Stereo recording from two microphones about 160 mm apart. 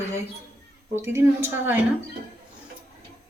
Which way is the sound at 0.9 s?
15° right (ahead or behind).